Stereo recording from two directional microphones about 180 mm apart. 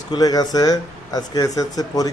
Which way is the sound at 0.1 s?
20° left (ahead or behind).